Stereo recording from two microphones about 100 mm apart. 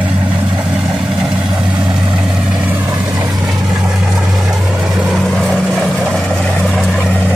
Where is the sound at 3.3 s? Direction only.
Centre (ahead or behind).